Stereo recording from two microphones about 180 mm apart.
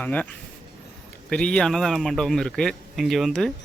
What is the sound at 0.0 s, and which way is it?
Speech, 10° left (ahead or behind).